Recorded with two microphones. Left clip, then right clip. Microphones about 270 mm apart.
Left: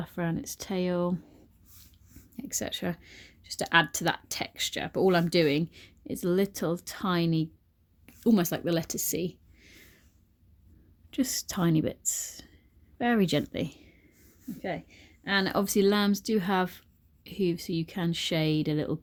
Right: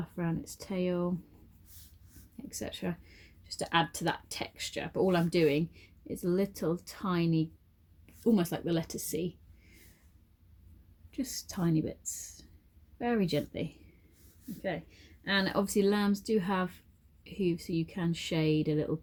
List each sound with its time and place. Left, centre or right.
0.0 s speech: left
2.3 s speech: left
11.1 s speech: left